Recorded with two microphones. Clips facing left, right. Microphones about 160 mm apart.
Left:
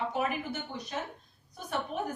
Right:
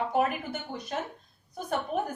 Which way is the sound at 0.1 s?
55° right (ahead or behind).